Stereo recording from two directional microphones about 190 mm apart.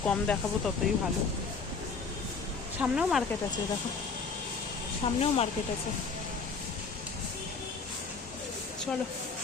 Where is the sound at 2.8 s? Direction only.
5° right (ahead or behind).